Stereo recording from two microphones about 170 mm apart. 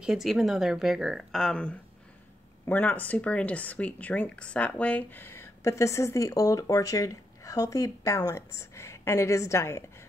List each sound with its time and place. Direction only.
0.0 s speech: centre (ahead or behind); by 9.8 s 15° left (ahead or behind)